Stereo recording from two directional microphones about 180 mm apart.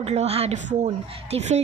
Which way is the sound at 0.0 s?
35° right (ahead or behind).